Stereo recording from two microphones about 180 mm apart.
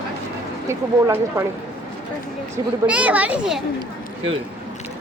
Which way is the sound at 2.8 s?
5° right (ahead or behind).